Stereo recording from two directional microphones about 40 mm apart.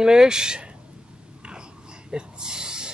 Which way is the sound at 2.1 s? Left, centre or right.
Centre.